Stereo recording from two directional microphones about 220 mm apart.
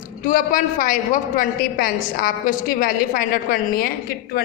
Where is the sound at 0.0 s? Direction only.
40° left (ahead or behind).